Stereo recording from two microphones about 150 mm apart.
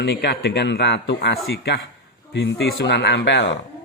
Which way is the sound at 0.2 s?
90° left.